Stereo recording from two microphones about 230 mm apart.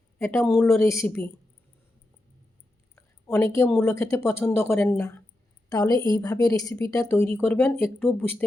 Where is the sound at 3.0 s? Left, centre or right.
Centre.